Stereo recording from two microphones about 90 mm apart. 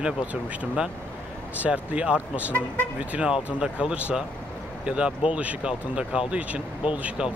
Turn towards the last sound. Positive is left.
turn(degrees=-10)  # may be behind; listen again after turning